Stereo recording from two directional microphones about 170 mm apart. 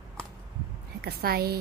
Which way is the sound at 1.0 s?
65° right (ahead or behind).